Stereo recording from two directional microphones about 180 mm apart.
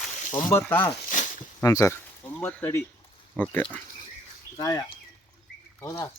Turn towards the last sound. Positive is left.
turn(degrees=15)  # may be behind; listen again after turning